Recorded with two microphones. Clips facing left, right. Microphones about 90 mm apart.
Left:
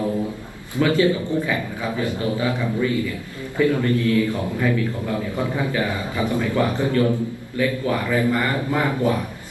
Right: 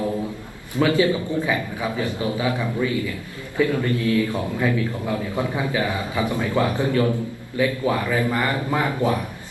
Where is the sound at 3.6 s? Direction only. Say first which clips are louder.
Left 2 dB; 15° right (ahead or behind).